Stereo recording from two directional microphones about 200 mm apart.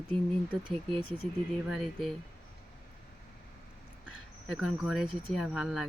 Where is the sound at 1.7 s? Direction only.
Centre (ahead or behind).